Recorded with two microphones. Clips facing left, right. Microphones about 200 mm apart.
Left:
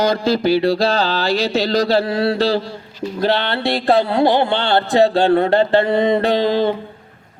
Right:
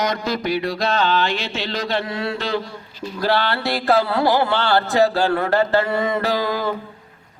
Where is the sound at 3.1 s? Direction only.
20° left (ahead or behind).